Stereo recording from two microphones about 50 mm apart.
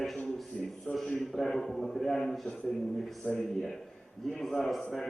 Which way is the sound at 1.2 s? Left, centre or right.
Centre.